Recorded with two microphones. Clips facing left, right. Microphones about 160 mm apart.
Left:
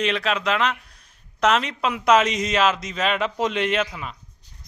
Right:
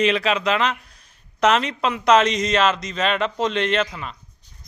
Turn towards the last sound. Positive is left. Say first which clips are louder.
# right 1 dB
turn(degrees=5)  # may be behind; listen again after turning